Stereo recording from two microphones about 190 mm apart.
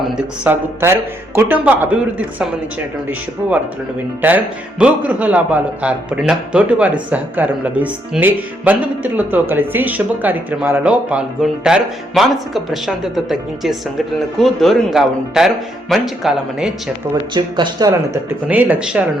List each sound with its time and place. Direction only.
0.2 s speech: 10° right (ahead or behind)
4.2 s speech: 10° right (ahead or behind)
17.3 s speech: 20° right (ahead or behind)
18.4 s speech: 5° right (ahead or behind)